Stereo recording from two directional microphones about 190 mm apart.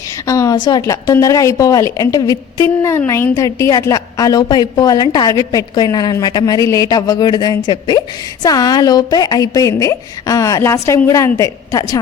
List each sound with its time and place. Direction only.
0.3 s a woman's voice: 15° left (ahead or behind)